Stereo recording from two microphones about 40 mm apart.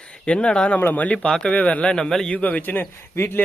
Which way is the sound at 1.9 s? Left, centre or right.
Centre.